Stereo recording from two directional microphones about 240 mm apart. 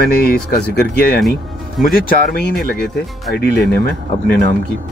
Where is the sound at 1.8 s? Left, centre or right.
Left.